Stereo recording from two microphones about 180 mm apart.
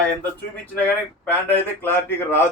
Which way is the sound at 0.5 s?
10° left (ahead or behind).